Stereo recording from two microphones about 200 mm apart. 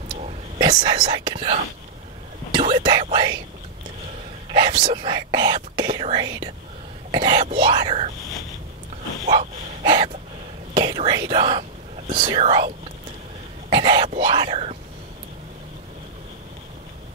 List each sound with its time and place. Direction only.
0.1 s whispering: 30° right (ahead or behind)
2.5 s speech: 30° right (ahead or behind)
4.5 s speech: 25° right (ahead or behind)
9.2 s dog: 35° right (ahead or behind)
9.8 s speech: 25° right (ahead or behind)